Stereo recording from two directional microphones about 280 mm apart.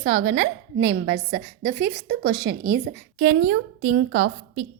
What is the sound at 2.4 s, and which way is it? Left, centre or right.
Speech, right.